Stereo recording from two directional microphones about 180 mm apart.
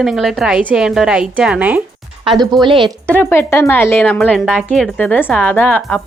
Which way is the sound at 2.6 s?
25° right (ahead or behind).